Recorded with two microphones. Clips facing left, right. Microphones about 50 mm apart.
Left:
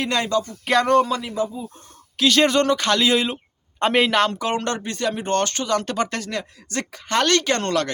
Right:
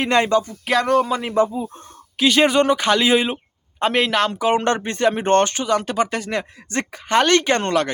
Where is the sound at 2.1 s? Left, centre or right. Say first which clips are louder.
Right 2 dB; centre.